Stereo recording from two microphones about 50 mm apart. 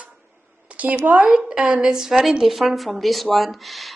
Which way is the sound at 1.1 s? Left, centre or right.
Right.